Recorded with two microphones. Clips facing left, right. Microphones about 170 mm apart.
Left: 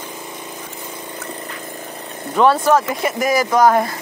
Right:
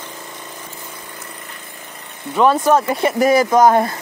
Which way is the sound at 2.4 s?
20° right (ahead or behind).